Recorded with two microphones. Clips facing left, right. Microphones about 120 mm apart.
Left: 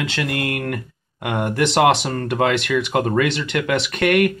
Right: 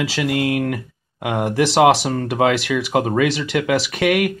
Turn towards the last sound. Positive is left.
turn(degrees=-5)  # may be behind; listen again after turning